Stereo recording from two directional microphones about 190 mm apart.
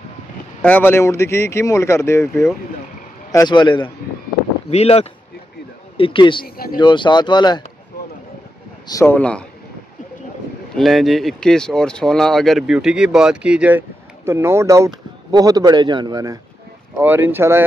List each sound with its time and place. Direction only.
0.6 s speech: 10° left (ahead or behind); by 6.4 s 25° left (ahead or behind)
6.4 s speech: 50° left (ahead or behind)
6.8 s speech: 25° left (ahead or behind)
8.8 s speech: 15° left (ahead or behind)
10.8 s speech: centre (ahead or behind)